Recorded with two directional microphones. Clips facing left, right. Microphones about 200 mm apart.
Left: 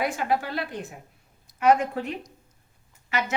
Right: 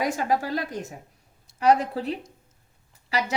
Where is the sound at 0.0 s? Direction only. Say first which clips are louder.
Right 1 dB; 40° right (ahead or behind).